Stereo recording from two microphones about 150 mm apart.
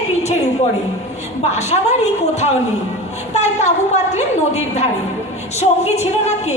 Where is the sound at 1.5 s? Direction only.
50° left (ahead or behind).